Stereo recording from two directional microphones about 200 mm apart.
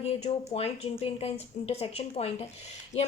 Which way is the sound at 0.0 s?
30° left (ahead or behind).